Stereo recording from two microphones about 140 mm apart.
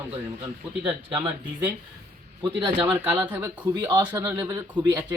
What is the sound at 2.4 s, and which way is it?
Speech, 35° right (ahead or behind).